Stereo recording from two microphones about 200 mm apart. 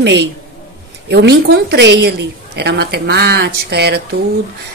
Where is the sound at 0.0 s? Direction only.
60° right (ahead or behind).